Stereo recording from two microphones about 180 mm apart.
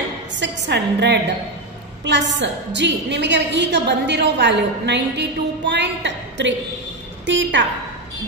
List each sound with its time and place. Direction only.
0.4 s a woman's voice: 70° right (ahead or behind)
7.2 s a woman's voice: 90° right